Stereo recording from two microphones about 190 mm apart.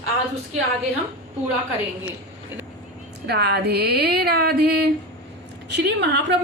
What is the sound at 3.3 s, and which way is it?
A woman's voice, 60° right (ahead or behind).